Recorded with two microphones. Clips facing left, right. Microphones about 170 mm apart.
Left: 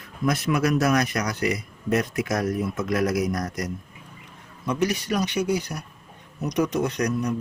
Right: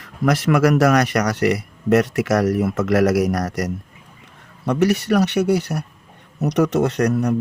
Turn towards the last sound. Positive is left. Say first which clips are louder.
# right 6 dB
turn(degrees=-70)  # may be behind; listen again after turning